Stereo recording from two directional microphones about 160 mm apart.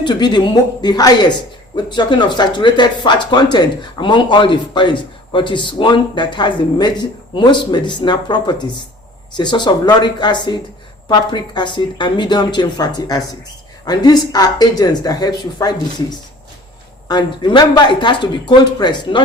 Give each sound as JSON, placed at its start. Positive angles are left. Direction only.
{"t": 0.0, "sound": "speech", "side_deg": 25}